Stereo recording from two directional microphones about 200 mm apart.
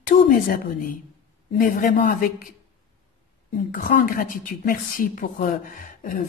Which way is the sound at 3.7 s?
45° left (ahead or behind).